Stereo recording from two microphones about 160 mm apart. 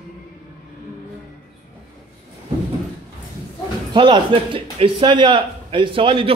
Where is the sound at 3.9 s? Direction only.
30° right (ahead or behind).